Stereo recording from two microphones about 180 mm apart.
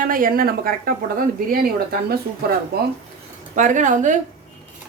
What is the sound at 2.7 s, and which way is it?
Speech, 60° right (ahead or behind).